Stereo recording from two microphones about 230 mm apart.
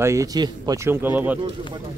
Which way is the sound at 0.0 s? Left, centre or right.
Centre.